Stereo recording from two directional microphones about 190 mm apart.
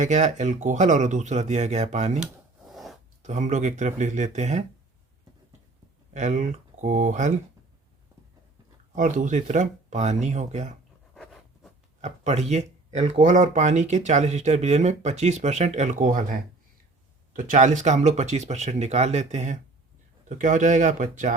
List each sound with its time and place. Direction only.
0.0 s speech: 40° right (ahead or behind)
2.7 s a sound: centre (ahead or behind)
3.2 s speech: 40° right (ahead or behind)
6.1 s speech: 40° right (ahead or behind)
9.0 s speech: 40° right (ahead or behind)
11.1 s writing: centre (ahead or behind)
12.0 s speech: 35° right (ahead or behind)
17.3 s speech: 45° right (ahead or behind)